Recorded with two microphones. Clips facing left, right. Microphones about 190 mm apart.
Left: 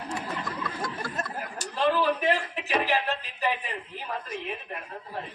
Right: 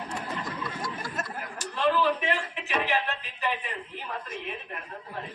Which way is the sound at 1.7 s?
35° left (ahead or behind).